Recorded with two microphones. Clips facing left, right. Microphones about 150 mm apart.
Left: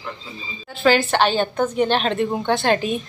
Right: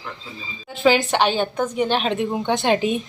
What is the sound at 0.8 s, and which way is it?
A woman's voice, 15° right (ahead or behind).